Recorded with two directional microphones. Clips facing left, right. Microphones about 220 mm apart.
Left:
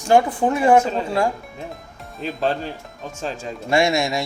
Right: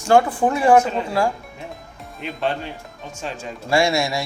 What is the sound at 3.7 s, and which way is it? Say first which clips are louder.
Speech: even; 20° left (ahead or behind).